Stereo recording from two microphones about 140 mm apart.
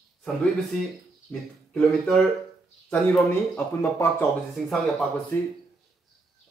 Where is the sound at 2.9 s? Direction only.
15° left (ahead or behind).